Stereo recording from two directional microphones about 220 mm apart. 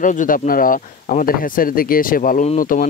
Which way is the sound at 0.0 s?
35° left (ahead or behind).